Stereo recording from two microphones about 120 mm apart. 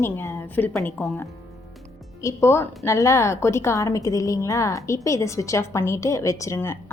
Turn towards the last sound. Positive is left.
turn(degrees=20)  # may be behind; listen again after turning